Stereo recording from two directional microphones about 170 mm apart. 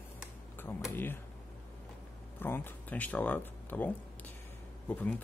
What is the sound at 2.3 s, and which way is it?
Speech, 10° left (ahead or behind).